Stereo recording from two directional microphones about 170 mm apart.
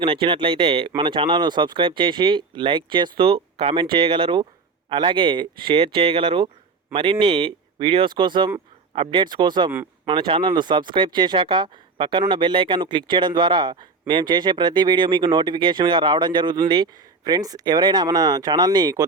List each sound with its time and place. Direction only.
0.0 s speech: 30° right (ahead or behind)